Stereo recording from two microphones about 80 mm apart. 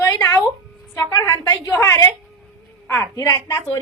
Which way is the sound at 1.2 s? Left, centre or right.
Left.